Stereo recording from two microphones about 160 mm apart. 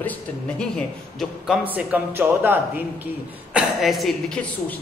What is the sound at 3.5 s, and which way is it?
Speech, centre (ahead or behind).